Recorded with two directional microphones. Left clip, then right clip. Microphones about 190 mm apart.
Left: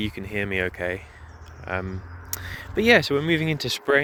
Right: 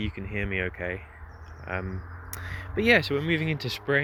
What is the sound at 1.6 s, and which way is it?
Speech, 20° left (ahead or behind).